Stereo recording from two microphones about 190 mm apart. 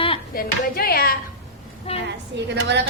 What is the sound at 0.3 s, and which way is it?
Speech, 50° left (ahead or behind).